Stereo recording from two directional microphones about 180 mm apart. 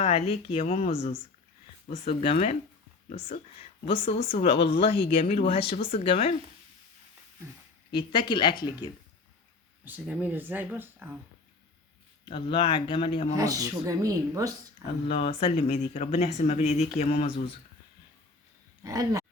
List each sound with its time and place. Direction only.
0.0 s speech: 35° left (ahead or behind)
7.9 s speech: 25° left (ahead or behind)
9.8 s speech: 10° right (ahead or behind)
12.2 s speech: 25° left (ahead or behind)
13.3 s speech: 20° right (ahead or behind)
15.0 s speech: 30° left (ahead or behind)
18.8 s speech: 20° right (ahead or behind)